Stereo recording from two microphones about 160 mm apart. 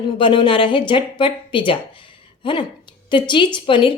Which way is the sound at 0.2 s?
30° left (ahead or behind).